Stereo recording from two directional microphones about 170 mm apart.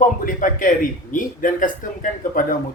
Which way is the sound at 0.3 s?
50° left (ahead or behind).